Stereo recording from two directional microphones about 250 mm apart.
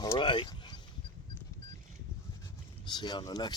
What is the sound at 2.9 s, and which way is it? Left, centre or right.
Speech, centre.